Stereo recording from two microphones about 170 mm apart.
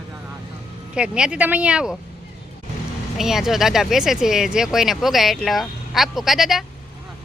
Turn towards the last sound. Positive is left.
turn(degrees=0)  # may be behind; listen again after turning